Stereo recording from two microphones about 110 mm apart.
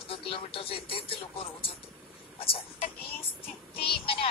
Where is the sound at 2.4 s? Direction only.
55° left (ahead or behind).